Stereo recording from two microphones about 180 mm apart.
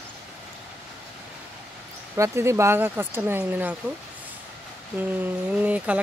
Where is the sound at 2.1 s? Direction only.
15° right (ahead or behind).